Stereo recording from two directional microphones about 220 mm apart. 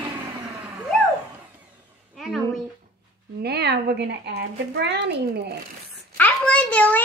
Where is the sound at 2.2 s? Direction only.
Centre (ahead or behind).